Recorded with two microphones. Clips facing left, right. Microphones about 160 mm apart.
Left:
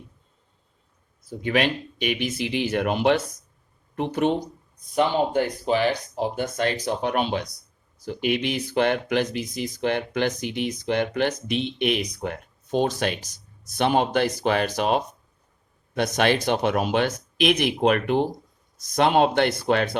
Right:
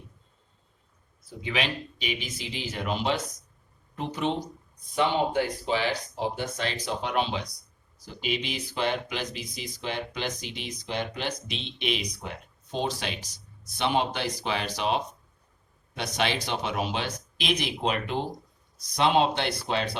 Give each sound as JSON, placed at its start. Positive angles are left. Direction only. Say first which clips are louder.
{"t": 1.3, "sound": "speech", "louder": "left 7 dB", "side_deg": 55}
{"t": 4.9, "sound": "speech", "louder": "left 4 dB", "side_deg": 45}